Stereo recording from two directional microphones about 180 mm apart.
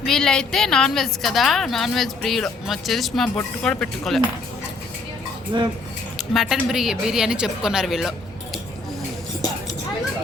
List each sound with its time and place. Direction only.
0.0 s a woman's voice: centre (ahead or behind)
5.5 s speech: 25° right (ahead or behind)
6.1 s a woman's voice: centre (ahead or behind)